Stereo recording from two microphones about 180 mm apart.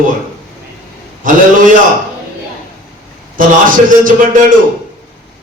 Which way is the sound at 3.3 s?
50° right (ahead or behind).